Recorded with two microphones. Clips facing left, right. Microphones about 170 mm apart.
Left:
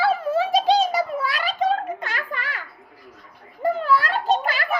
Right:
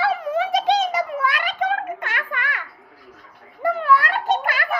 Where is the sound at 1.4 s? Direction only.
35° left (ahead or behind).